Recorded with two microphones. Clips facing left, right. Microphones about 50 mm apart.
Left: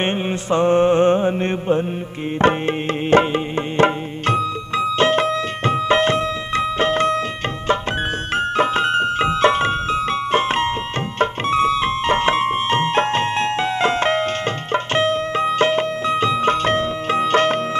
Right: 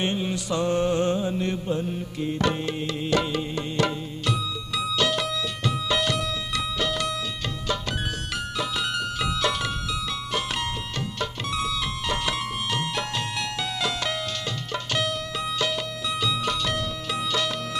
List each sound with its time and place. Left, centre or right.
0.0 s mantra: left
2.3 s music: left
8.4 s music: left